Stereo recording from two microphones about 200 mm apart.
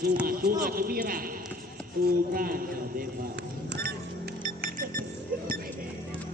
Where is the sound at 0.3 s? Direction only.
45° right (ahead or behind).